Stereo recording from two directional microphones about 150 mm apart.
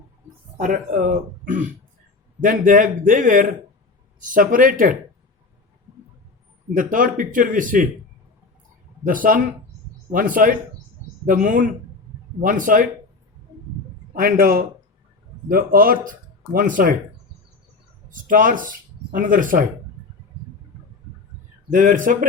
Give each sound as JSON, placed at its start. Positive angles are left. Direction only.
{"t": 0.5, "sound": "a man's voice", "side_deg": -65}
{"t": 2.4, "sound": "a man's voice", "side_deg": -65}
{"t": 6.7, "sound": "a man's voice", "side_deg": -65}
{"t": 9.0, "sound": "a man's voice", "side_deg": -65}
{"t": 14.1, "sound": "a man's voice", "side_deg": -75}
{"t": 18.1, "sound": "speech", "side_deg": -65}
{"t": 21.7, "sound": "a man's voice", "side_deg": -60}